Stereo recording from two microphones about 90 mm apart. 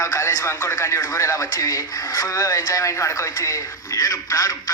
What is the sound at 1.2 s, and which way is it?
Speech, 35° left (ahead or behind).